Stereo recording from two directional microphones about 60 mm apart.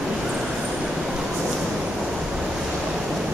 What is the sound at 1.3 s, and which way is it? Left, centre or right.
Waves, centre.